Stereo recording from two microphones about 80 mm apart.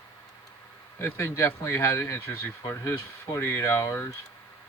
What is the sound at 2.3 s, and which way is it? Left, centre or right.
Speech, left.